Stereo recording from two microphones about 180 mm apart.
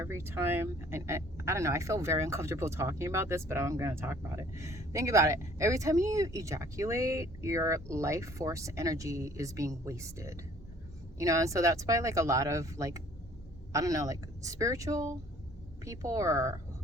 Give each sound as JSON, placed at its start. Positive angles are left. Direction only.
{"t": 0.0, "sound": "speech", "side_deg": -15}